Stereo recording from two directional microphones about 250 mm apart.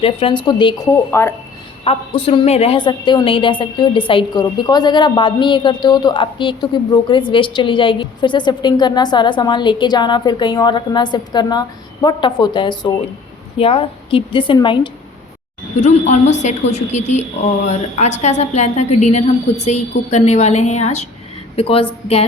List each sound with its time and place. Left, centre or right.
0.0 s speech: left
1.8 s a woman's voice: left
15.8 s a woman's voice: left